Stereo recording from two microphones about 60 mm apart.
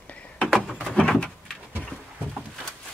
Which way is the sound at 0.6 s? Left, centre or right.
Centre.